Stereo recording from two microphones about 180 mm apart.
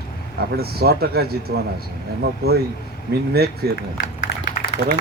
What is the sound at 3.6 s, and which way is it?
Speech, 65° right (ahead or behind).